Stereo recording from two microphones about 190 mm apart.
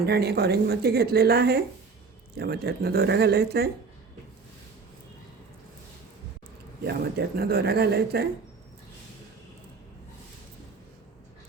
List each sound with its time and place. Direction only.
0.0 s a woman's voice: 60° right (ahead or behind)
6.8 s a woman's voice: 60° right (ahead or behind)